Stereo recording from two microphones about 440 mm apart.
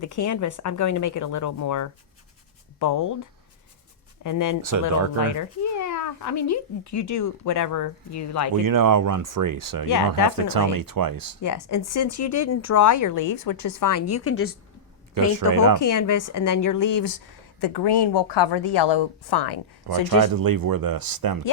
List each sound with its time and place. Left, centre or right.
0.0 s speech: left
8.6 s speech: right
11.4 s speech: left
15.1 s speech: right
15.8 s speech: left
19.9 s speech: right